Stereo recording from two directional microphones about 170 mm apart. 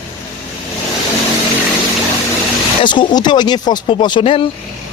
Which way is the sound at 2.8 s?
25° left (ahead or behind).